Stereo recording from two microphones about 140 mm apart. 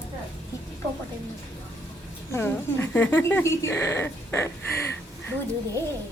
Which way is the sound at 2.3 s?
15° left (ahead or behind).